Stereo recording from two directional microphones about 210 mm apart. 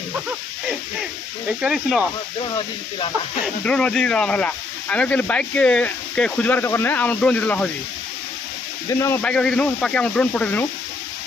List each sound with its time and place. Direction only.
1.6 s speech: 5° right (ahead or behind)
2.4 s speech: 20° left (ahead or behind)
3.6 s speech: 5° left (ahead or behind)
8.8 s speech: 10° left (ahead or behind)